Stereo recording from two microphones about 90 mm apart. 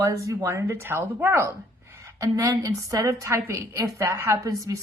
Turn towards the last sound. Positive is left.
turn(degrees=-35)  # may be behind; listen again after turning